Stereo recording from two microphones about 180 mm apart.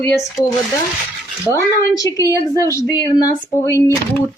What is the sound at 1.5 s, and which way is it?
A woman's voice, 15° left (ahead or behind).